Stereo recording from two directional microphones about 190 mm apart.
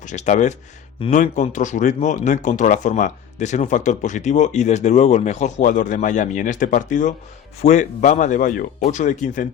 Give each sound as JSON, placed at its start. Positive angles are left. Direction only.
{"t": 0.0, "sound": "speech", "side_deg": 40}